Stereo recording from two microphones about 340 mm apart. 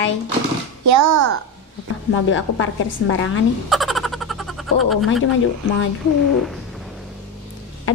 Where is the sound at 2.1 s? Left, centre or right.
Left.